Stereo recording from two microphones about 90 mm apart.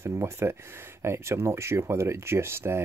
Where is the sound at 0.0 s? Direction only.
30° right (ahead or behind).